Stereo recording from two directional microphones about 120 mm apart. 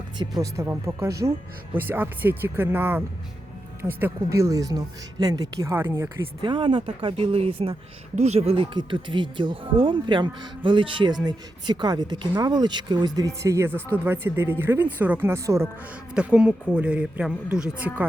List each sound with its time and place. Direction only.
0.2 s speech: 30° right (ahead or behind)
1.7 s speech: 15° right (ahead or behind); by 5.7 s 30° right (ahead or behind)
5.7 s speech: 20° right (ahead or behind)
6.4 s speech: 40° right (ahead or behind)
8.1 s speech: 65° right (ahead or behind); by 15.6 s 25° right (ahead or behind)
16.1 s speech: 5° right (ahead or behind)